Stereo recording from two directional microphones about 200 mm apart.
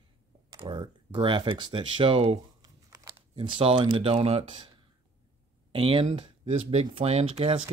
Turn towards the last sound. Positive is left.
turn(degrees=-25)  # may be behind; listen again after turning